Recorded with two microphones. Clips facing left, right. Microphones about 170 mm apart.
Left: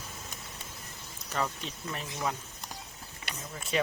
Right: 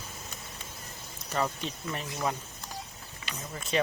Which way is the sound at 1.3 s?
Centre (ahead or behind).